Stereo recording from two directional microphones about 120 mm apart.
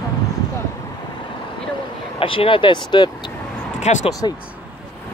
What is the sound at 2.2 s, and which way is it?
Speech, 45° left (ahead or behind).